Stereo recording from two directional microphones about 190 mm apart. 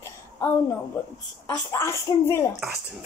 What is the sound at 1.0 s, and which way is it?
Speech, 10° left (ahead or behind).